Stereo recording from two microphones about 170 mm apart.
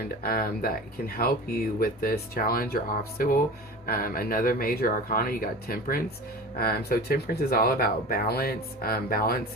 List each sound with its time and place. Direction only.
0.0 s speech: 65° left (ahead or behind)